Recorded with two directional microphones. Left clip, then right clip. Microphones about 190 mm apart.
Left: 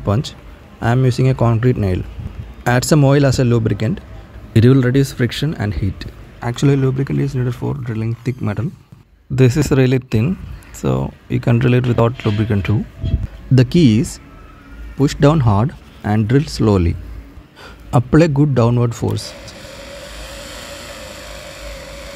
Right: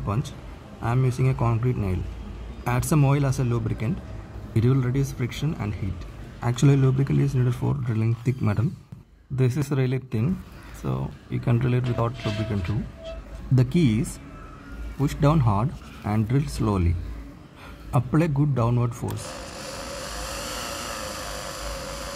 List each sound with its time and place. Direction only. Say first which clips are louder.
0.0 s a man's voice: left 10 dB; 25° left (ahead or behind)
13.6 s speech: left 10 dB; 20° left (ahead or behind)
17.9 s speech: left 11 dB; 20° left (ahead or behind)
20.5 s vehicle: even; 5° right (ahead or behind)